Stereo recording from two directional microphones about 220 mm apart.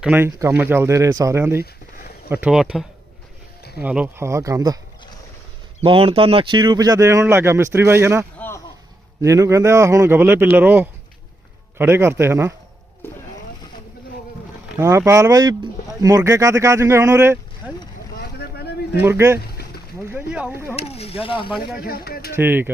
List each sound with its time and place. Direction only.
0.0 s speech: 10° right (ahead or behind)
5.8 s speech: 25° right (ahead or behind)
8.4 s a sound: 10° left (ahead or behind)
9.2 s speech: 15° right (ahead or behind)
13.0 s vehicle: 10° left (ahead or behind)
14.7 s speech: 10° right (ahead or behind)
18.2 s vehicle: 45° left (ahead or behind)
18.9 s speech: 10° right (ahead or behind)
20.7 s speech: 25° left (ahead or behind)
21.8 s speech: 45° left (ahead or behind)
22.3 s speech: 10° right (ahead or behind)